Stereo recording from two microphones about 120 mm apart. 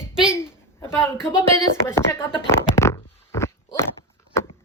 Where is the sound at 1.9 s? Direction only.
20° left (ahead or behind).